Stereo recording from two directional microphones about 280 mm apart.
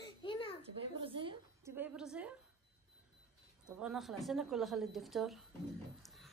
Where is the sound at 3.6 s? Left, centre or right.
Centre.